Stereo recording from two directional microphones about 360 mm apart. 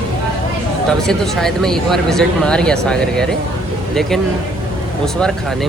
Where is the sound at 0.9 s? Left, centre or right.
Centre.